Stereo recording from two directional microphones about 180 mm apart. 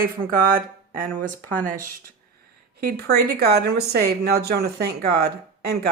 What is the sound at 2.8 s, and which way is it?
Speech, 60° right (ahead or behind).